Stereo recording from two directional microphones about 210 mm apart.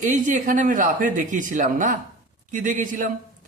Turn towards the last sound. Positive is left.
turn(degrees=-40)  # may be behind; listen again after turning